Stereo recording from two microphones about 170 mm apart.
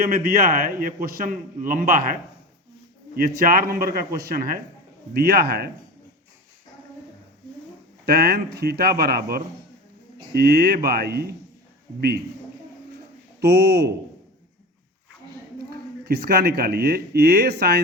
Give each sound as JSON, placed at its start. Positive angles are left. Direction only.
{"t": 0.1, "sound": "a man's voice", "side_deg": -60}
{"t": 3.2, "sound": "a man's voice", "side_deg": -60}
{"t": 8.0, "sound": "speech", "side_deg": -65}
{"t": 10.3, "sound": "a man's voice", "side_deg": -70}
{"t": 13.4, "sound": "speech", "side_deg": -75}
{"t": 15.7, "sound": "speech", "side_deg": -65}